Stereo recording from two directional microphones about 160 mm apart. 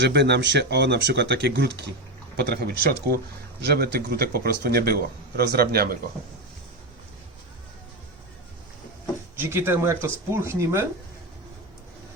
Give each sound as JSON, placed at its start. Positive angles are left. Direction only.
{"t": 0.0, "sound": "speech", "side_deg": -90}
{"t": 9.4, "sound": "speech", "side_deg": -15}